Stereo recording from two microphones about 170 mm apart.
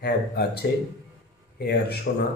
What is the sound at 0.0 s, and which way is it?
Speech, 70° left (ahead or behind).